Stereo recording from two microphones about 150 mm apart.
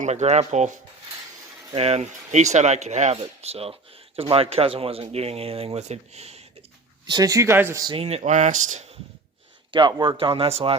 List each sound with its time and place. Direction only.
0.0 s speech: 50° right (ahead or behind)
7.1 s speech: 25° right (ahead or behind)
8.0 s speech: 50° right (ahead or behind)
9.7 s speech: 35° right (ahead or behind)